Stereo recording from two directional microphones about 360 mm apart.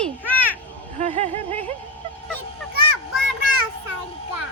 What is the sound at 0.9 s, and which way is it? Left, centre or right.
Speech, centre.